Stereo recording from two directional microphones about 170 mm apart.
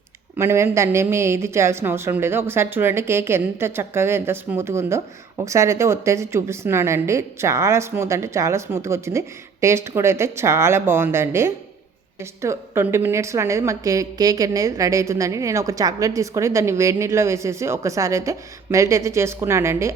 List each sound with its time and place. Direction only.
0.3 s a woman's voice: 15° right (ahead or behind)